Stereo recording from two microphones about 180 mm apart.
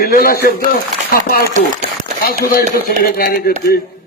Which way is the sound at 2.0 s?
55° left (ahead or behind).